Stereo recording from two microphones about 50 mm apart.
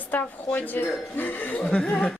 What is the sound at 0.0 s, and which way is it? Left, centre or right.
Speech, left.